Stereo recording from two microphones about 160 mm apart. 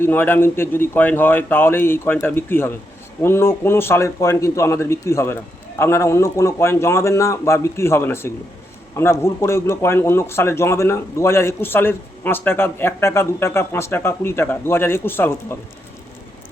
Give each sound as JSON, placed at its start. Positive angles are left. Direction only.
{"t": 0.0, "sound": "a man's voice", "side_deg": 10}